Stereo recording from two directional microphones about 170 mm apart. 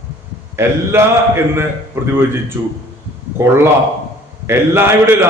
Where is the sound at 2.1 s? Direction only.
15° right (ahead or behind).